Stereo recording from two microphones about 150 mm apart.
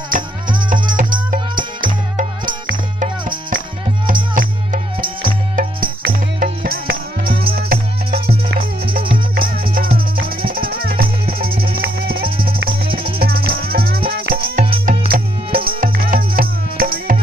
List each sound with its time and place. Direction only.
0.1 s music: 65° right (ahead or behind)
3.0 s music: 65° right (ahead or behind)
5.0 s music: 75° right (ahead or behind)
8.3 s music: 35° right (ahead or behind)
9.3 s music: 75° right (ahead or behind)
12.8 s music: 35° right (ahead or behind)
13.2 s music: 85° right